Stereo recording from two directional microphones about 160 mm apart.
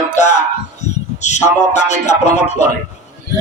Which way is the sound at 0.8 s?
45° left (ahead or behind).